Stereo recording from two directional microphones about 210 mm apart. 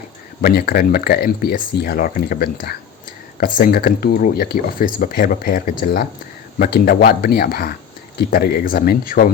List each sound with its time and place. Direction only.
0.4 s speech: 45° left (ahead or behind)